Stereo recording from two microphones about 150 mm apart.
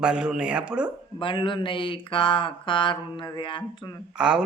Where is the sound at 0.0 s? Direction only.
5° right (ahead or behind).